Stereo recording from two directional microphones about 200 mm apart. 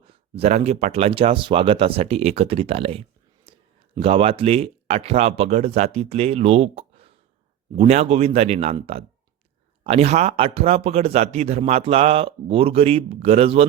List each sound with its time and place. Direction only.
0.0 s speech: 30° right (ahead or behind)